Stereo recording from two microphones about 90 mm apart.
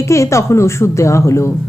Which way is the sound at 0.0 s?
35° left (ahead or behind).